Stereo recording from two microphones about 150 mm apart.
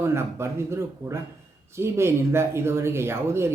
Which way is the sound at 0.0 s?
15° right (ahead or behind).